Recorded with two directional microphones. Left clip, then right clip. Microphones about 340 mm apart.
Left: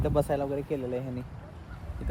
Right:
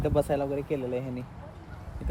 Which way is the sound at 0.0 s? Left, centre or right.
Centre.